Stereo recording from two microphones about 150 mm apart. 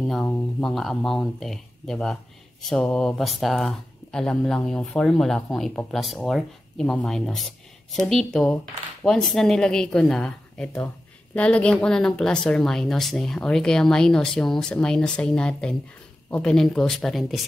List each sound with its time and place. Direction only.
0.2 s speech: 10° left (ahead or behind)